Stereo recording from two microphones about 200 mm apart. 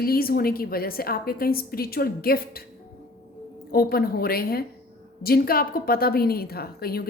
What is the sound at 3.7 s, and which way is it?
Speech, 50° left (ahead or behind).